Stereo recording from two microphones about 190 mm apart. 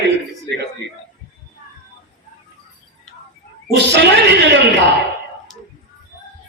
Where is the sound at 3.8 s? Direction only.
60° right (ahead or behind).